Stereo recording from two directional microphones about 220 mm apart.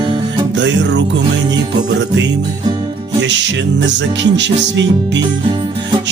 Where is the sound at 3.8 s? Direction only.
55° right (ahead or behind).